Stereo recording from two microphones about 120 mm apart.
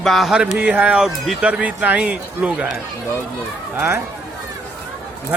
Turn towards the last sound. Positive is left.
turn(degrees=-20)  # may be behind; listen again after turning